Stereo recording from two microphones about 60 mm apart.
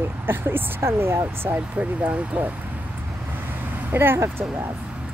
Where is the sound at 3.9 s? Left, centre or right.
Right.